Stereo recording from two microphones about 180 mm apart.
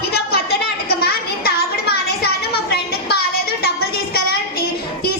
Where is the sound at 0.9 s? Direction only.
60° left (ahead or behind).